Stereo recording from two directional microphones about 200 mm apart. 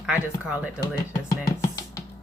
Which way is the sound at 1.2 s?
15° left (ahead or behind).